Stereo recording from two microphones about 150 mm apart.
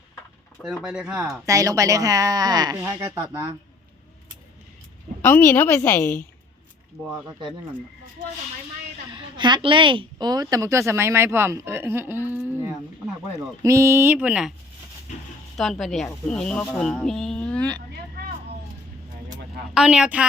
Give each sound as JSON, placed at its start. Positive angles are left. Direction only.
{"t": 0.6, "sound": "speech", "side_deg": 0}
{"t": 1.5, "sound": "a woman's voice", "side_deg": -20}
{"t": 5.2, "sound": "a woman's voice", "side_deg": 15}
{"t": 9.1, "sound": "a woman's voice", "side_deg": -30}
{"t": 12.5, "sound": "a sound", "side_deg": -15}
{"t": 13.6, "sound": "speech", "side_deg": -20}
{"t": 15.5, "sound": "speech", "side_deg": 0}
{"t": 19.7, "sound": "speech", "side_deg": -5}